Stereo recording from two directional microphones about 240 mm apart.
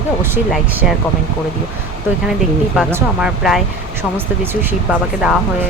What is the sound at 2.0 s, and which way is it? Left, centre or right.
Speech, centre.